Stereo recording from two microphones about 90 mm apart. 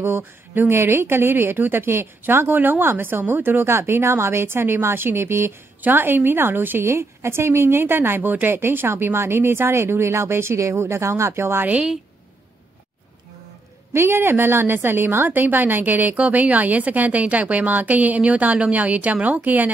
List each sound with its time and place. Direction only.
0.0 s a woman's voice: 25° right (ahead or behind)
11.7 s speech: 10° right (ahead or behind)
13.9 s a woman's voice: 25° right (ahead or behind)